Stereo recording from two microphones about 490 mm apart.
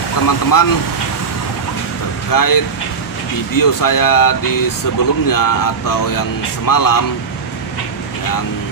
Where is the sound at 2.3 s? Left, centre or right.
Left.